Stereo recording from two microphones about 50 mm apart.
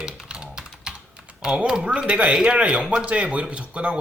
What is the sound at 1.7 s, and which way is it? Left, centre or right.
Speech, right.